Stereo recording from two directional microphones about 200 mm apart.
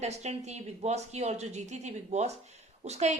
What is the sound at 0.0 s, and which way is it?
Speech, 35° right (ahead or behind).